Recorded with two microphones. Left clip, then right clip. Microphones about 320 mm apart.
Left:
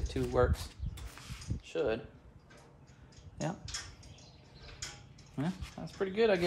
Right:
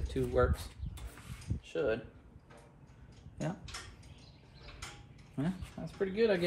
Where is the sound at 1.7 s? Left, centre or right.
Centre.